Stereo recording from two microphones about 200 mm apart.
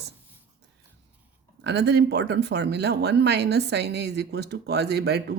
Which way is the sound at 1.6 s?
55° right (ahead or behind).